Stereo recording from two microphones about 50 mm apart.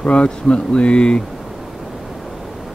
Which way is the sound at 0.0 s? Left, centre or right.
Left.